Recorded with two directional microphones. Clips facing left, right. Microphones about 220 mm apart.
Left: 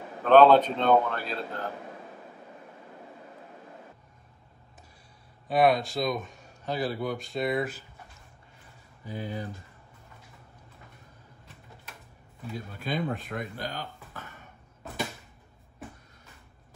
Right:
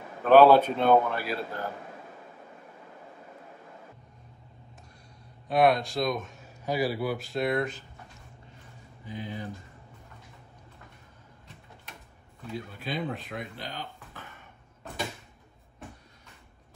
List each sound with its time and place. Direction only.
0.2 s a man's voice: 10° right (ahead or behind)
5.5 s speech: centre (ahead or behind)
9.0 s speech: 40° left (ahead or behind)
12.7 s speech: 45° left (ahead or behind)